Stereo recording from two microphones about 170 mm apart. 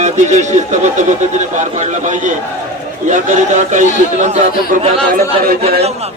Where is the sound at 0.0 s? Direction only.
45° right (ahead or behind).